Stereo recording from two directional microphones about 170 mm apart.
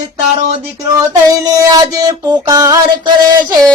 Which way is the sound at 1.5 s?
20° right (ahead or behind).